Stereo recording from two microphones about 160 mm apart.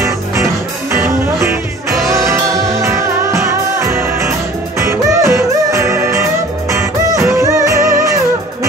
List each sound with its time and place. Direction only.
0.9 s music: 15° right (ahead or behind)